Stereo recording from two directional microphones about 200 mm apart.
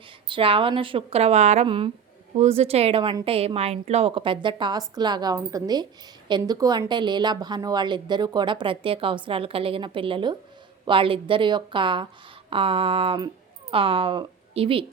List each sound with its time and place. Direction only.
0.3 s a woman's voice: 25° right (ahead or behind)